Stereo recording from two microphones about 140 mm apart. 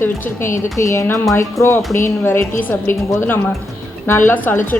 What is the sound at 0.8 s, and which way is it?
Speech, 20° left (ahead or behind).